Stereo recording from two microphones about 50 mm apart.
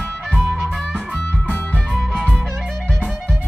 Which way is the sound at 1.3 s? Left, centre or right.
Left.